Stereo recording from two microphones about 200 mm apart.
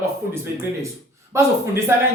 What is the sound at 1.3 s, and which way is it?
Speech, 15° right (ahead or behind).